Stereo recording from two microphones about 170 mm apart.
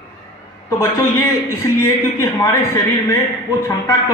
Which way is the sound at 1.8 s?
15° left (ahead or behind).